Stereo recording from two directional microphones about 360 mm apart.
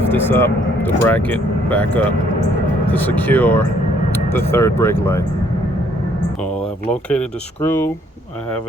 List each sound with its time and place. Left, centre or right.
0.0 s speech: centre
6.4 s speech: centre